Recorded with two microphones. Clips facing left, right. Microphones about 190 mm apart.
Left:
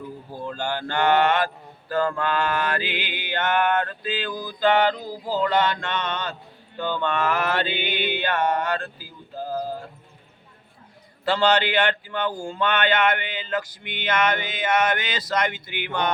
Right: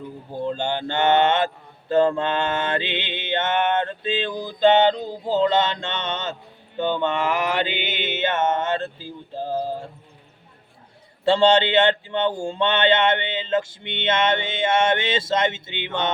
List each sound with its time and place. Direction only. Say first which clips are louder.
0.3 s speech: right 5 dB; 20° right (ahead or behind)
11.3 s speech: right 4 dB; 25° right (ahead or behind)